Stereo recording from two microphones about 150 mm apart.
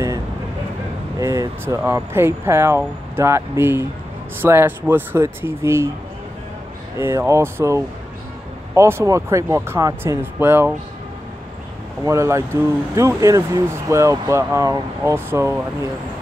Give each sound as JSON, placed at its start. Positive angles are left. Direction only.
{"t": 1.2, "sound": "speech", "side_deg": -20}
{"t": 7.0, "sound": "speech", "side_deg": -15}
{"t": 12.0, "sound": "speech", "side_deg": -20}